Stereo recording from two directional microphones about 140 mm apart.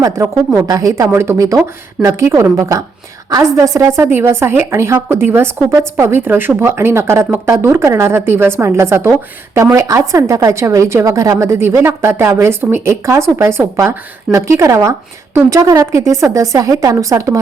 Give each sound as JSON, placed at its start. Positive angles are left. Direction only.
{"t": 0.2, "sound": "a woman's voice", "side_deg": -20}